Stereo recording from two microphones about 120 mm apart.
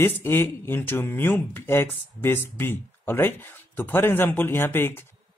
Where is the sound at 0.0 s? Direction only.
20° left (ahead or behind).